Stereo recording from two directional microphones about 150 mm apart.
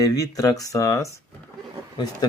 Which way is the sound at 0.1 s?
25° left (ahead or behind).